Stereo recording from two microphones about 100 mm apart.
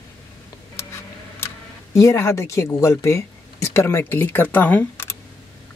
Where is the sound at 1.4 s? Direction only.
30° left (ahead or behind).